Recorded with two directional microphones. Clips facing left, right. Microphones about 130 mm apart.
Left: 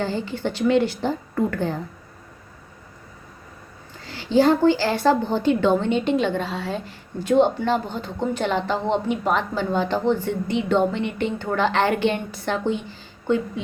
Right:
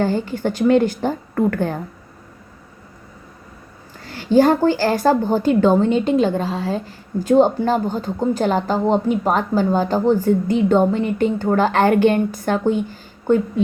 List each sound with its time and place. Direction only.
0.0 s a woman's voice: 45° right (ahead or behind)
4.3 s a woman's voice: 45° right (ahead or behind)